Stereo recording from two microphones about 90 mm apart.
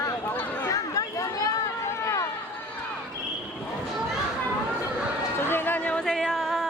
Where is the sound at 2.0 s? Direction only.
35° left (ahead or behind).